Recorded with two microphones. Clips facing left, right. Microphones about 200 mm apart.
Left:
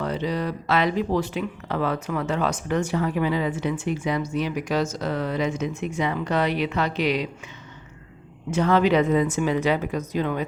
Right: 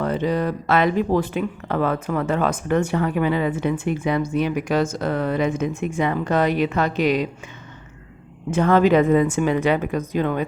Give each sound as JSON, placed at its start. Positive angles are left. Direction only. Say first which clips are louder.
{"t": 0.0, "sound": "speech", "louder": "right 4 dB", "side_deg": -50}
{"t": 8.4, "sound": "a woman's voice", "louder": "right 3 dB", "side_deg": -50}